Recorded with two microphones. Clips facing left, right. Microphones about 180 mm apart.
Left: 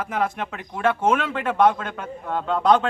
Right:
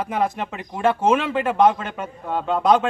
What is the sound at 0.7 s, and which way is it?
Speech, 25° right (ahead or behind).